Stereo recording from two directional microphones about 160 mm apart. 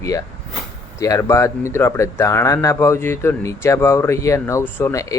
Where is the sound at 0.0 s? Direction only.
20° left (ahead or behind).